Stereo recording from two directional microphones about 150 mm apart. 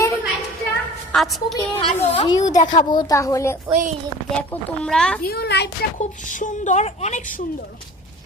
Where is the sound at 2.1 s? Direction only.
30° left (ahead or behind).